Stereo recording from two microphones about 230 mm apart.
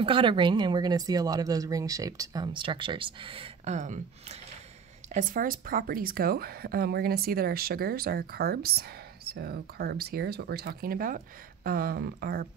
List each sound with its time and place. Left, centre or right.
0.0 s speech: right